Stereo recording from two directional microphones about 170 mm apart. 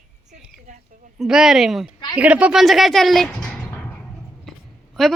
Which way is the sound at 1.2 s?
5° right (ahead or behind).